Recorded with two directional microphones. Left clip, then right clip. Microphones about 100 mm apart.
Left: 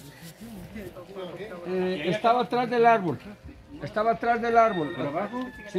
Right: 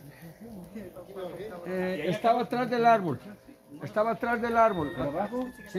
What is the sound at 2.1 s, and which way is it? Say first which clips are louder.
Speech: left 3 dB; 20° right (ahead or behind).